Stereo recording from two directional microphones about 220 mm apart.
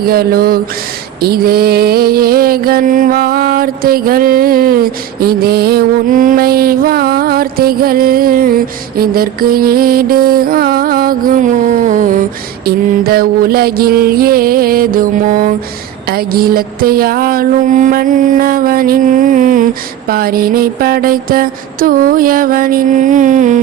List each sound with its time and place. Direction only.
0.1 s mantra: 45° right (ahead or behind)
9.0 s music: 40° right (ahead or behind)
12.6 s mantra: 45° right (ahead or behind)